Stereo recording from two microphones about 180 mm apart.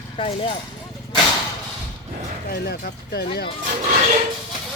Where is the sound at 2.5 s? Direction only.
65° left (ahead or behind).